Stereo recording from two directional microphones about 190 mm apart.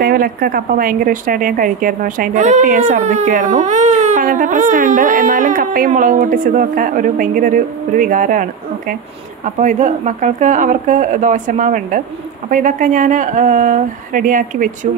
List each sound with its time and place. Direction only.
0.0 s speech: 50° right (ahead or behind)